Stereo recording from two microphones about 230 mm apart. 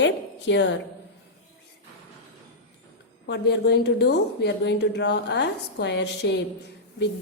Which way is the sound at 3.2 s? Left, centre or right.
Left.